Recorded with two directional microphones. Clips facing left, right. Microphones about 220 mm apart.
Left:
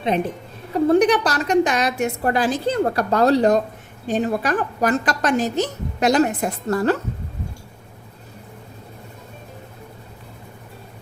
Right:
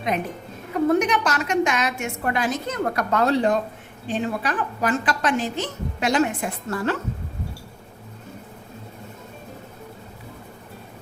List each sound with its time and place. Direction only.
0.7 s a woman's voice: 35° left (ahead or behind)